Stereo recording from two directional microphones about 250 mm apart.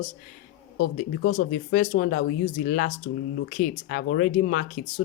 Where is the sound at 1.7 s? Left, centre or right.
Left.